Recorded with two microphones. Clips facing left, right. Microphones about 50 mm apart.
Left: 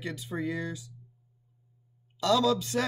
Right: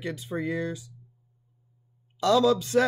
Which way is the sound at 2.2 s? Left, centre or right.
Right.